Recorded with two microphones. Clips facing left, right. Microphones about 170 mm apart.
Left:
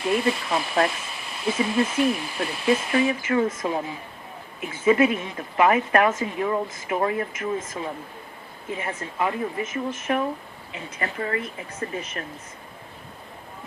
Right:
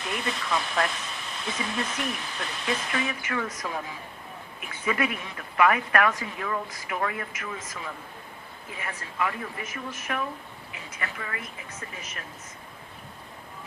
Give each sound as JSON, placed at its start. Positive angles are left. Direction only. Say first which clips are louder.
{"t": 0.1, "sound": "speech", "louder": "left 6 dB", "side_deg": 30}